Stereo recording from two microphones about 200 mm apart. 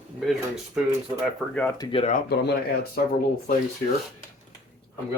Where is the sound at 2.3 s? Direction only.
55° left (ahead or behind).